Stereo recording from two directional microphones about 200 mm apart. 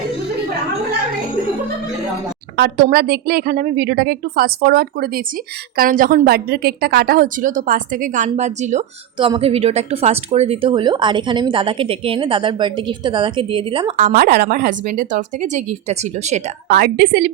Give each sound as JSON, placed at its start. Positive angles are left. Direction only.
{"t": 2.6, "sound": "a woman's voice", "side_deg": -50}
{"t": 9.1, "sound": "speech", "side_deg": -25}
{"t": 14.1, "sound": "a woman's voice", "side_deg": -55}
{"t": 16.7, "sound": "a woman's voice", "side_deg": -50}